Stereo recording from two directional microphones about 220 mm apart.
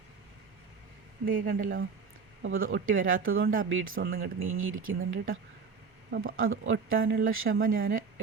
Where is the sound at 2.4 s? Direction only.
65° right (ahead or behind).